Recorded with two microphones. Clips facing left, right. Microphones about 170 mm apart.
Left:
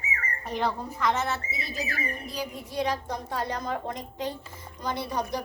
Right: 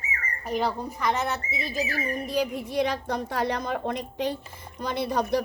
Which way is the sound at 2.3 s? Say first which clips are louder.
Right 6 dB; 65° right (ahead or behind).